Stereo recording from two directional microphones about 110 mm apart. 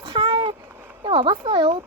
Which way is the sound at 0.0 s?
45° right (ahead or behind).